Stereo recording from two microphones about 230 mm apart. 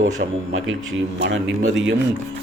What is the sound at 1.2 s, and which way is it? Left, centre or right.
Speech, right.